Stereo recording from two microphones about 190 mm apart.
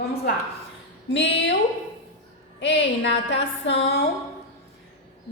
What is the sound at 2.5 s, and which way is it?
Music, 70° left (ahead or behind).